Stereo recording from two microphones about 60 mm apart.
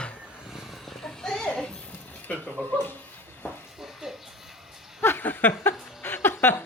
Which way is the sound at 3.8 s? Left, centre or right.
Centre.